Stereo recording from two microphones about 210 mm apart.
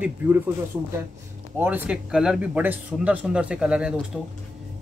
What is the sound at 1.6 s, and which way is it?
Speech, 10° right (ahead or behind).